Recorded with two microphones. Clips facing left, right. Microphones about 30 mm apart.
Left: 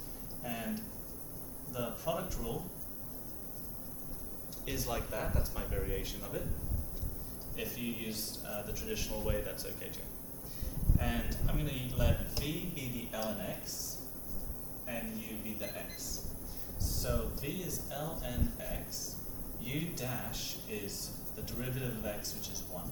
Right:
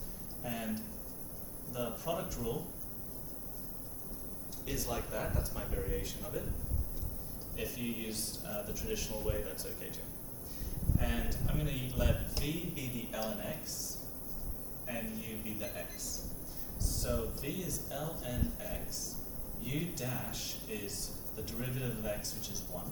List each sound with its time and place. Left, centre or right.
0.4 s a sound: centre
1.7 s a man's voice: centre
4.6 s speech: centre
4.9 s a man's voice: centre
5.8 s speech: centre
7.5 s a man's voice: centre
10.9 s a man's voice: centre
14.8 s a man's voice: centre
17.0 s a man's voice: centre